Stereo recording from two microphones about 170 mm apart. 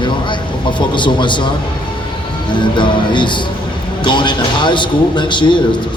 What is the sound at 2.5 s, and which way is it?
A man's voice, 30° left (ahead or behind).